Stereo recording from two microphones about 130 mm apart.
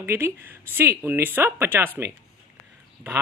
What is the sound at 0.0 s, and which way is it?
Speech, 20° right (ahead or behind).